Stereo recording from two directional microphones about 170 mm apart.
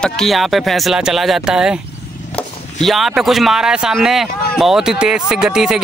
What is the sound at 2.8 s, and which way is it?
Speech, centre (ahead or behind).